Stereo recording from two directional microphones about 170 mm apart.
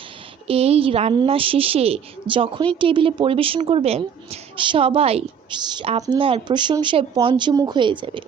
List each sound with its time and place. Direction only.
0.4 s a woman's voice: 35° right (ahead or behind)